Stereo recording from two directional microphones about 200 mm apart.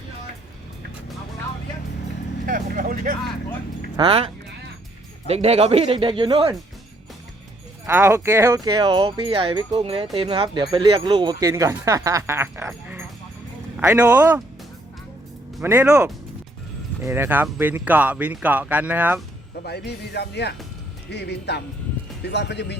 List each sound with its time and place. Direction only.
2.5 s vehicle: 45° right (ahead or behind)
3.9 s speech: 25° right (ahead or behind)
5.3 s speech: 30° right (ahead or behind)
7.9 s speech: 10° right (ahead or behind)
15.6 s speech: 10° right (ahead or behind)
19.6 s speech: 55° left (ahead or behind)